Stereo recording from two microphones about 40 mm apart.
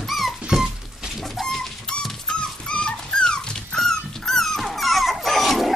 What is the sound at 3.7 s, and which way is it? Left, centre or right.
Dog, centre.